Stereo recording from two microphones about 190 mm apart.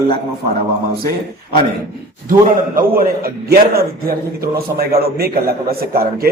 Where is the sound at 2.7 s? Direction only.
50° right (ahead or behind).